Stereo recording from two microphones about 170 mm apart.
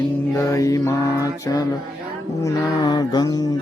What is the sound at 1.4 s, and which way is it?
Music, 20° left (ahead or behind).